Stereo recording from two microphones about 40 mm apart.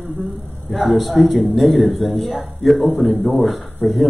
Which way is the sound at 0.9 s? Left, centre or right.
Centre.